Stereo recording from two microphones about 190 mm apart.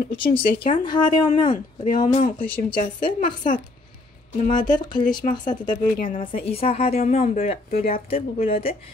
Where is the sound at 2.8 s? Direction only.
45° left (ahead or behind).